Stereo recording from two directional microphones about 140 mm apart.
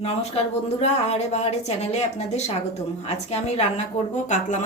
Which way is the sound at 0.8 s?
50° left (ahead or behind).